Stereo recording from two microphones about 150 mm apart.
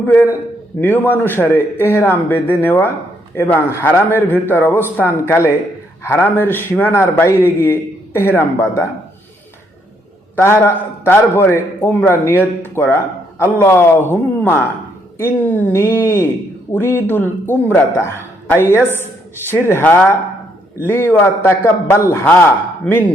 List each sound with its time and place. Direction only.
0.0 s a man's voice: 10° left (ahead or behind)
10.3 s a man's voice: 15° left (ahead or behind)